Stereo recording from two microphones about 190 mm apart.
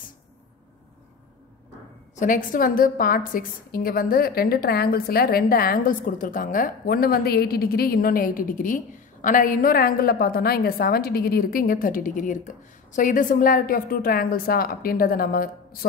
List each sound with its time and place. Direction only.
2.1 s a woman's voice: 45° left (ahead or behind)